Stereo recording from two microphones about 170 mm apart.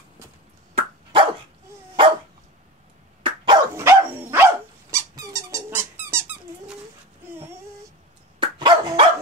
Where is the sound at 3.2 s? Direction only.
30° right (ahead or behind).